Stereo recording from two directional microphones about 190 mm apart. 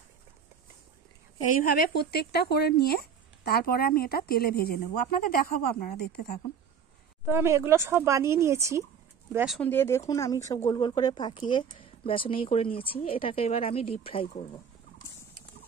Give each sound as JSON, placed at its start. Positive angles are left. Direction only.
{"t": 1.6, "sound": "speech", "side_deg": 50}
{"t": 7.2, "sound": "speech", "side_deg": -15}
{"t": 9.6, "sound": "speech", "side_deg": 10}